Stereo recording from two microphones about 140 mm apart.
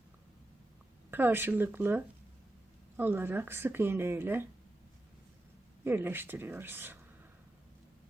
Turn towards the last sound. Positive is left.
turn(degrees=-15)  # may be behind; listen again after turning